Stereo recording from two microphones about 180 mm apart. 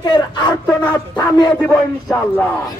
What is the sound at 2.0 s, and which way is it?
Speech, 10° left (ahead or behind).